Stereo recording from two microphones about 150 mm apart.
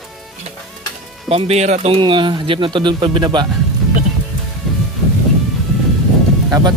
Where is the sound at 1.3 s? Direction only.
45° right (ahead or behind).